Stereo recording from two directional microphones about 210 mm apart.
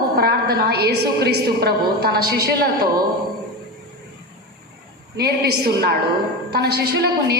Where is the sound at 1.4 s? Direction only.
50° right (ahead or behind).